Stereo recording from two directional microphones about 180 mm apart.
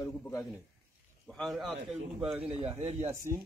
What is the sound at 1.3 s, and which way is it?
Speech, centre (ahead or behind).